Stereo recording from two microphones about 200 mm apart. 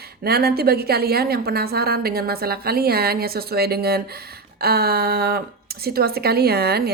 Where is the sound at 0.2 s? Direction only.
50° right (ahead or behind).